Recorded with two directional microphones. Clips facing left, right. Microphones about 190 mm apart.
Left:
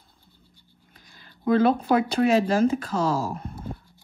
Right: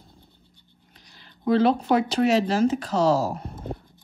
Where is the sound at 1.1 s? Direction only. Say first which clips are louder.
Even; 50° left (ahead or behind).